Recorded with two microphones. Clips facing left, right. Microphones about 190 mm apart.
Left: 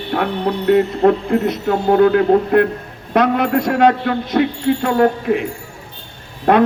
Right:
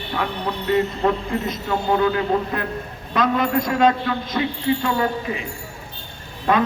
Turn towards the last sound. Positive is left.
turn(degrees=60)  # may be behind; listen again after turning